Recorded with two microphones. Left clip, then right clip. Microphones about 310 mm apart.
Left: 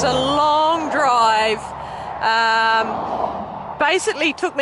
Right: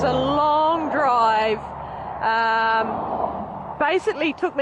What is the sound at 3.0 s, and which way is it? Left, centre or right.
Vehicle, right.